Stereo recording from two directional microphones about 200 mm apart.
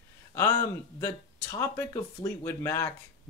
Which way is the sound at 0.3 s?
15° left (ahead or behind).